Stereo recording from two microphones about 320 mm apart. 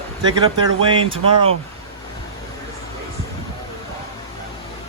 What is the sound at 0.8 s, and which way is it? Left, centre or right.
Speech, centre.